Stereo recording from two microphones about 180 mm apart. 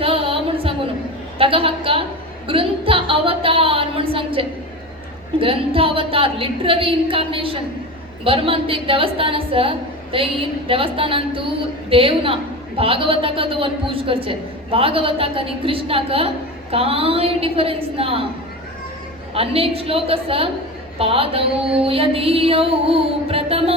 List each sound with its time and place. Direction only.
0.0 s a sound: 30° right (ahead or behind)
1.4 s a woman's voice: 30° right (ahead or behind)
19.3 s a woman's voice: 30° right (ahead or behind)